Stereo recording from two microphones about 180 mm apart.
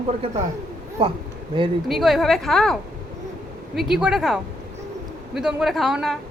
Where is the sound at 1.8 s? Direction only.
Centre (ahead or behind).